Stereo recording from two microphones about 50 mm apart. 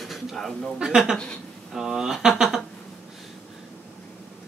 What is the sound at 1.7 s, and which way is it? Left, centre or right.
Speech, centre.